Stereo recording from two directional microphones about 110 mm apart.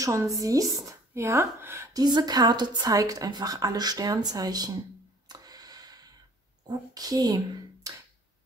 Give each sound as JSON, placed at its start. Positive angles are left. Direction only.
{"t": 0.0, "sound": "speech", "side_deg": -30}
{"t": 2.0, "sound": "a woman's voice", "side_deg": -40}
{"t": 5.3, "sound": "a sound", "side_deg": -35}
{"t": 6.7, "sound": "speech", "side_deg": -35}